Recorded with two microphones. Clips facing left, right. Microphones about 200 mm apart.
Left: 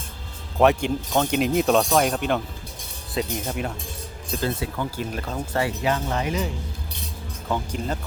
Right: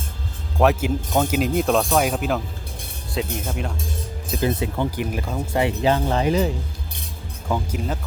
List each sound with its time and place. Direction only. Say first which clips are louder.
0.6 s speech: even; 5° right (ahead or behind)
4.4 s speech: right 4 dB; 20° right (ahead or behind)
5.6 s speech: right 5 dB; 30° right (ahead or behind)
7.4 s speech: right 2 dB; 5° right (ahead or behind)